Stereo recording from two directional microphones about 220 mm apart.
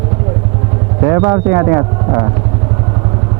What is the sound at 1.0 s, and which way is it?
Speech, 15° right (ahead or behind).